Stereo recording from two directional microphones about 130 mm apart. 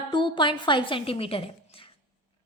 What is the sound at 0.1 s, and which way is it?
A woman's voice, 40° left (ahead or behind).